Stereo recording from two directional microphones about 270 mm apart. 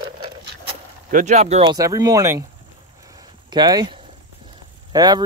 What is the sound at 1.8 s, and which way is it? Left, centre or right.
Speech, centre.